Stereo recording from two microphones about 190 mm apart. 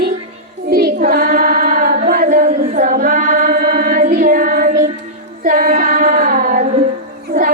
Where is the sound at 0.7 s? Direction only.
55° right (ahead or behind).